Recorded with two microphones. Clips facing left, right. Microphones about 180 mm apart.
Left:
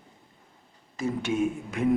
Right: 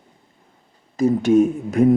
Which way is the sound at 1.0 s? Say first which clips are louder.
Right 12 dB; 40° right (ahead or behind).